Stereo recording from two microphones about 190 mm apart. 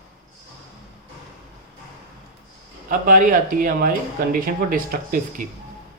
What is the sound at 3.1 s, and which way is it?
Speech, 45° right (ahead or behind).